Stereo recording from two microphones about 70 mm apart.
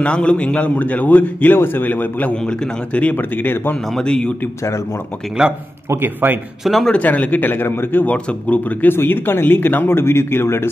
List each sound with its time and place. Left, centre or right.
0.0 s a man's voice: centre
5.4 s a man's voice: centre
5.9 s speech: right
6.6 s a man's voice: centre
6.9 s a man's voice: left